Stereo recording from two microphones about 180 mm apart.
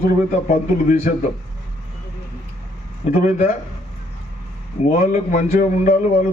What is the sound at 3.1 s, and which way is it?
Speech, 45° left (ahead or behind).